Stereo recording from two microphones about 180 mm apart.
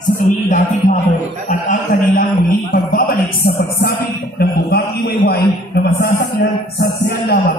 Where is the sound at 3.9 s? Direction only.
60° left (ahead or behind).